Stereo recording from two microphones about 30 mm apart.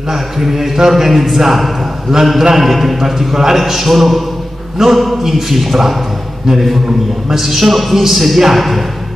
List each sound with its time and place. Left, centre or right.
0.1 s a man's voice: centre
7.2 s a man's voice: centre